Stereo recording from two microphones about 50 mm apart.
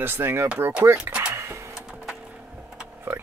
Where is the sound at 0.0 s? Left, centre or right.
Right.